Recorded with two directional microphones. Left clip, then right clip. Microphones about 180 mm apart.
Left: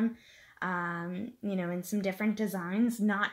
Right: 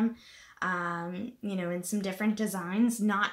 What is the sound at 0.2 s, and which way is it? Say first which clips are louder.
Speech: right 3 dB; 35° left (ahead or behind).